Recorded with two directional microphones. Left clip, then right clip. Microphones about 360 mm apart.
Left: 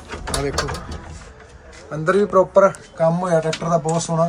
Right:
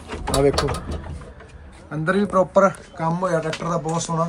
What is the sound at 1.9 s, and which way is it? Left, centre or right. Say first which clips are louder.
A man's voice: left 4 dB; centre.